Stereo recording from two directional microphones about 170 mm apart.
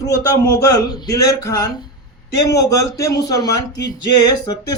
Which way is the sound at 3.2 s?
20° left (ahead or behind).